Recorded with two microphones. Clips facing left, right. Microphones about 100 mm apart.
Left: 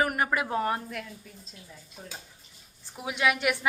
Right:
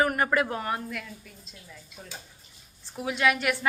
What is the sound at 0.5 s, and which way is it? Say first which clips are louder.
Speech: left 3 dB; 30° left (ahead or behind).